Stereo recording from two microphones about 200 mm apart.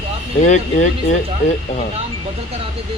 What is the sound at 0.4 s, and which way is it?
Speech, 35° left (ahead or behind).